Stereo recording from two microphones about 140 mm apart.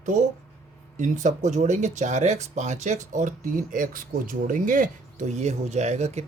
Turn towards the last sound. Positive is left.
turn(degrees=-55)  # may be behind; listen again after turning